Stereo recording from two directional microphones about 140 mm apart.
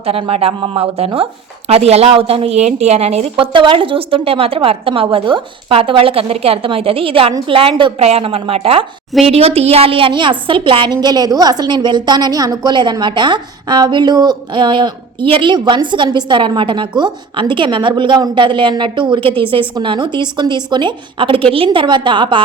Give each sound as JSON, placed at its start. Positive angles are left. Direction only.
{"t": 0.0, "sound": "a woman's voice", "side_deg": -45}